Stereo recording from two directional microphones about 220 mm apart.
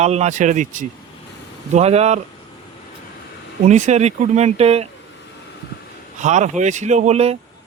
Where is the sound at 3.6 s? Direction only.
30° right (ahead or behind).